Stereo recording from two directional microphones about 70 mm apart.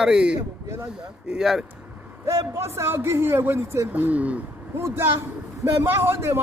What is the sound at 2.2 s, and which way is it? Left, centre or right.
A man's voice, right.